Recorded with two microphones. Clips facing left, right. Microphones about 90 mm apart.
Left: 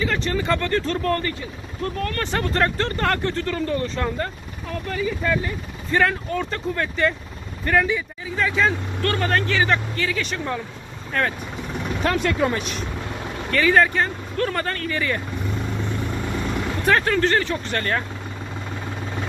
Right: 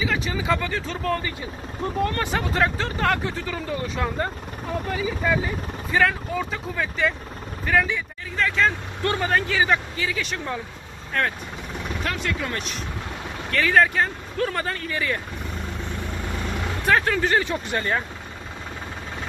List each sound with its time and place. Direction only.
0.0 s speech: 5° right (ahead or behind)
1.8 s speech: 15° right (ahead or behind)
2.3 s speech: 5° right (ahead or behind)
9.0 s speech: 15° right (ahead or behind)
9.3 s speech: 5° right (ahead or behind)
12.0 s speech: 45° left (ahead or behind)
12.5 s speech: centre (ahead or behind)
16.8 s speech: centre (ahead or behind)